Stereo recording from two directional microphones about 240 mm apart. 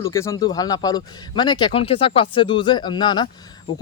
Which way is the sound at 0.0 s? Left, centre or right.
Centre.